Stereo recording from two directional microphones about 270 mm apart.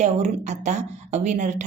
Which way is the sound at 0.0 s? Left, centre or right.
Right.